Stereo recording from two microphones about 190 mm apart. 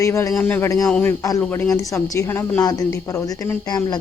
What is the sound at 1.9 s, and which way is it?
A woman's voice, 15° left (ahead or behind).